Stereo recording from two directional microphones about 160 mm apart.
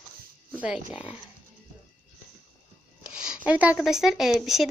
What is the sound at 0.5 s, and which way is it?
Speech, 10° right (ahead or behind).